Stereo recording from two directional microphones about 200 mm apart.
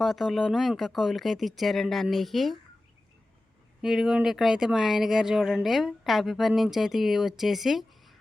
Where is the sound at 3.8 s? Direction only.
5° right (ahead or behind).